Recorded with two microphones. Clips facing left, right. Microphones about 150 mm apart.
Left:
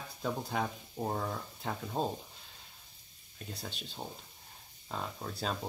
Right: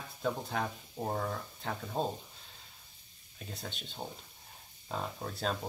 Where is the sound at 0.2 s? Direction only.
5° left (ahead or behind).